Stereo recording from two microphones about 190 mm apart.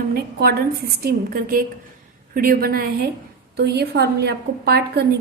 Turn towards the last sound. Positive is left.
turn(degrees=-55)  # may be behind; listen again after turning